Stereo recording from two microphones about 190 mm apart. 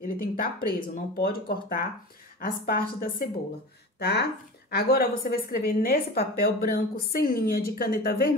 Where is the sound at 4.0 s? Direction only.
60° left (ahead or behind).